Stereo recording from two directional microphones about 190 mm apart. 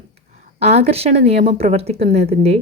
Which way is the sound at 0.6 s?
35° right (ahead or behind).